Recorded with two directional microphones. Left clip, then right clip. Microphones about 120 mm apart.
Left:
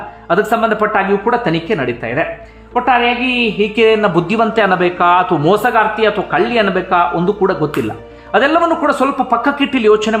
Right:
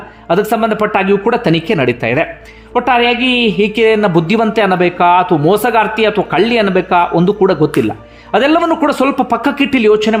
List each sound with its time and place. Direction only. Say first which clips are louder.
0.3 s a woman's voice: right 1 dB; 30° right (ahead or behind)
0.9 s a woman's voice: right 1 dB; 45° right (ahead or behind); by 5.4 s 25° right (ahead or behind)
5.7 s speech: right 1 dB; 35° right (ahead or behind)